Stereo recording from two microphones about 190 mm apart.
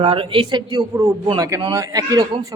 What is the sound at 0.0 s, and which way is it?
Speech, 25° right (ahead or behind).